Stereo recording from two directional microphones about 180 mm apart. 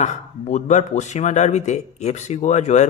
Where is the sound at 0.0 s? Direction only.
40° left (ahead or behind).